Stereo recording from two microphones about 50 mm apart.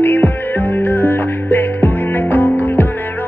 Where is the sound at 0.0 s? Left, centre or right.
Left.